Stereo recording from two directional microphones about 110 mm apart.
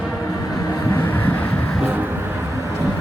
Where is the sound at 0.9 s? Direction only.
20° left (ahead or behind).